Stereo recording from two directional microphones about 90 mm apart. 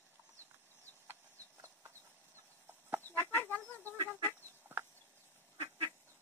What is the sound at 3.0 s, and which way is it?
Chicken, 25° left (ahead or behind).